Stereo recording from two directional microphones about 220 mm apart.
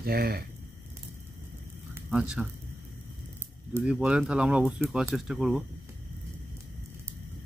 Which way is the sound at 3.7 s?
5° right (ahead or behind).